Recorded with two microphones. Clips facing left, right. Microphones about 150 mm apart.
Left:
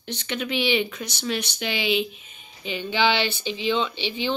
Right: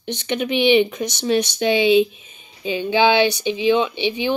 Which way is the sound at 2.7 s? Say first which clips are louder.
Right 6 dB; 15° right (ahead or behind).